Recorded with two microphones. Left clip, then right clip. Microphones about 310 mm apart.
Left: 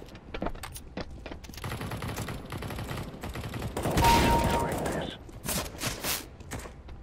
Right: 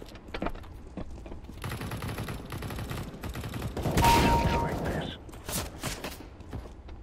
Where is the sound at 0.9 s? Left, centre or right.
Left.